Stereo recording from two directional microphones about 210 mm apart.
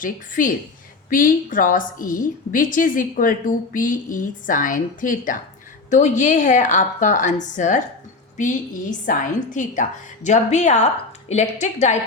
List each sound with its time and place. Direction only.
0.0 s a woman's voice: 40° left (ahead or behind)